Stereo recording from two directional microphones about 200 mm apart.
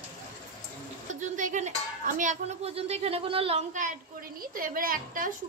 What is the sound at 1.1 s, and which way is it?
A woman's voice, 40° right (ahead or behind).